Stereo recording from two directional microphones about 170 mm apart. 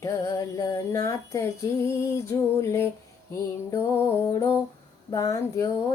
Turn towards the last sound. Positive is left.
turn(degrees=20)  # may be behind; listen again after turning